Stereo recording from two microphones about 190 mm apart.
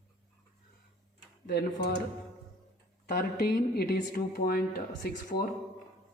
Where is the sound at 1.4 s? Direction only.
65° left (ahead or behind).